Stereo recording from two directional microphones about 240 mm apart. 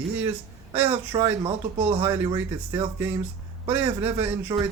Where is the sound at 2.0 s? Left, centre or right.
Centre.